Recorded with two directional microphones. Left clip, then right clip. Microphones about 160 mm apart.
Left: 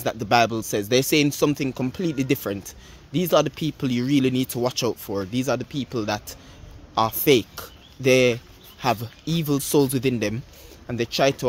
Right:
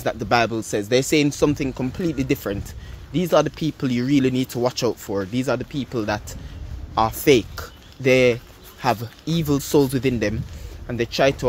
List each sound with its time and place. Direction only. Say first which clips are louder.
0.0 s speech: even; 20° left (ahead or behind)